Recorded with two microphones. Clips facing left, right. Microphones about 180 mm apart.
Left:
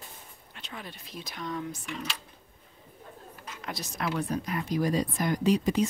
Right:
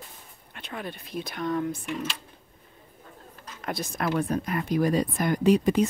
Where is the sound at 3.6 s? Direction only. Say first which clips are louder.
Right 5 dB; 50° right (ahead or behind).